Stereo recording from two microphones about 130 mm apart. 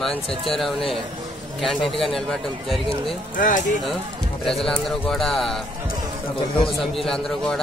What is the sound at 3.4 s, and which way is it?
Speech, 90° left.